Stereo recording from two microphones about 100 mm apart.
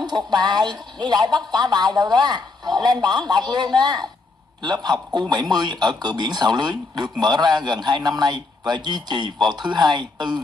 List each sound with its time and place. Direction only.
0.0 s a man's voice: 45° right (ahead or behind)